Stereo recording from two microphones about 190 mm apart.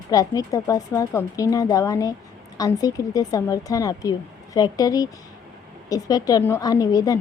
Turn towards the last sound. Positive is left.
turn(degrees=20)  # may be behind; listen again after turning